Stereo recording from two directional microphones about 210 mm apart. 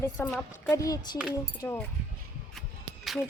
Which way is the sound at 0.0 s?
10° left (ahead or behind).